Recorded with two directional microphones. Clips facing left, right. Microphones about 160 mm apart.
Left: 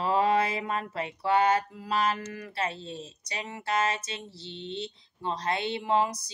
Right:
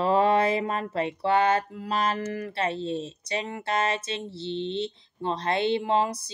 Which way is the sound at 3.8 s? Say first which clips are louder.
Right 2 dB; 25° right (ahead or behind).